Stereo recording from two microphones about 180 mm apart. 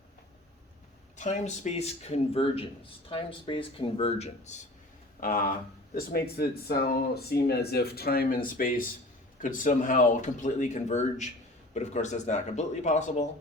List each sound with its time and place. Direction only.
1.1 s speech: 40° left (ahead or behind)
5.2 s speech: 50° left (ahead or behind)